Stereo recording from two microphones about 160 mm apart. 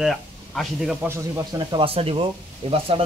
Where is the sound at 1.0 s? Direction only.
20° right (ahead or behind).